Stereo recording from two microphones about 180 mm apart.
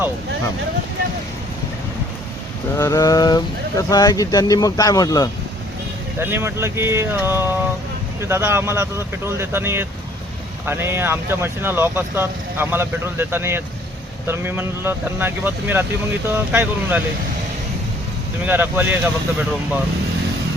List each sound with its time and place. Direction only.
2.7 s speech: 15° left (ahead or behind)
6.1 s speech: 15° right (ahead or behind)
18.4 s speech: 10° right (ahead or behind)